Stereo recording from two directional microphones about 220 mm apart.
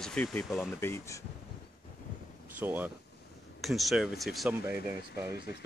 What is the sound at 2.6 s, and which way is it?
Speech, 10° right (ahead or behind).